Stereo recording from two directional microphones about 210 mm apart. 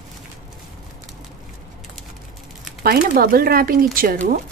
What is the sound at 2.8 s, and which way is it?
Speech, 45° right (ahead or behind).